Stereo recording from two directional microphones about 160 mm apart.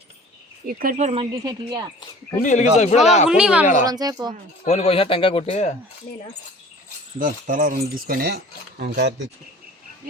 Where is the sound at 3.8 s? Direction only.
25° right (ahead or behind).